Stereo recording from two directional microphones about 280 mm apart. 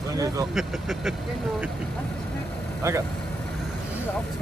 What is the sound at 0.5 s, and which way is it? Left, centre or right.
Speech, centre.